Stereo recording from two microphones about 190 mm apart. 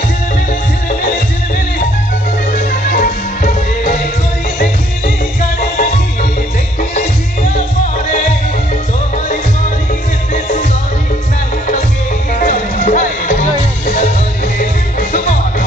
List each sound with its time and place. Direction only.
2.5 s music: 45° left (ahead or behind)
5.6 s music: 45° left (ahead or behind)
10.3 s music: 40° left (ahead or behind)
12.4 s music: 45° left (ahead or behind)